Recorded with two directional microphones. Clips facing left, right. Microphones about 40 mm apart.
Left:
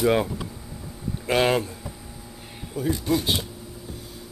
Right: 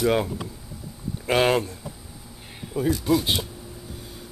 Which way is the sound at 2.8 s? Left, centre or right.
Centre.